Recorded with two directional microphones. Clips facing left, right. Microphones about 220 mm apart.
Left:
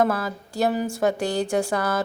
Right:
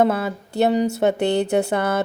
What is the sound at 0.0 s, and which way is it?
Speech, 25° right (ahead or behind).